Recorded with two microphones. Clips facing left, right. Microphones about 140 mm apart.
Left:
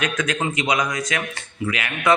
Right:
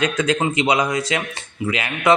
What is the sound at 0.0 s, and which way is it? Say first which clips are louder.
A man's voice: right 4 dB; 30° right (ahead or behind).